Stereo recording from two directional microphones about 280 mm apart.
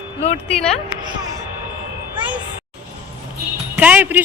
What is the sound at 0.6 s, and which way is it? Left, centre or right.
Speech, centre.